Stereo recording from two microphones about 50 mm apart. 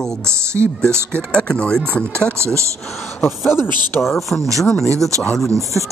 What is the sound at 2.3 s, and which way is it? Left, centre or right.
Speech, right.